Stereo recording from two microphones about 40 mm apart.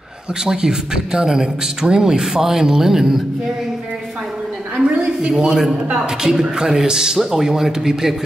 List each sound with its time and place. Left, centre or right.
0.5 s speech: centre
4.7 s a woman's voice: right